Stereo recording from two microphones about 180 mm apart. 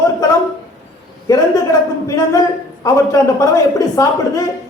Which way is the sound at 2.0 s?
20° left (ahead or behind).